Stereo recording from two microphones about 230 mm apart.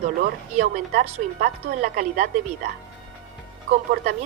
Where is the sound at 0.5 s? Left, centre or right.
Right.